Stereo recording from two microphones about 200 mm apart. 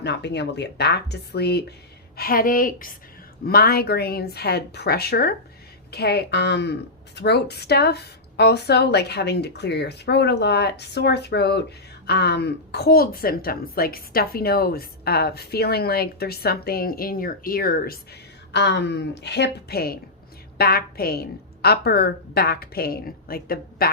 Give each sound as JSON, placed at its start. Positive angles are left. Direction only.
{"t": 0.0, "sound": "a woman's voice", "side_deg": 60}
{"t": 18.5, "sound": "a woman's voice", "side_deg": 60}